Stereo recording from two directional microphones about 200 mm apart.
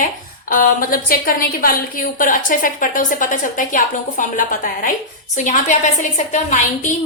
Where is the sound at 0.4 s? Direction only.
45° left (ahead or behind).